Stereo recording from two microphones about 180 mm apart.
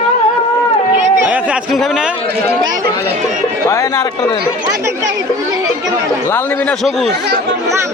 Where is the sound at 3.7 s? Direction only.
20° left (ahead or behind).